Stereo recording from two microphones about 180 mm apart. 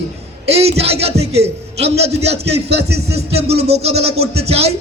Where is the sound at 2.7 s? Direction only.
65° right (ahead or behind).